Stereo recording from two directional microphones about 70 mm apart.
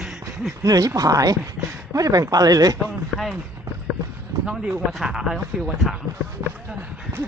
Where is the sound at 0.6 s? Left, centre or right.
Right.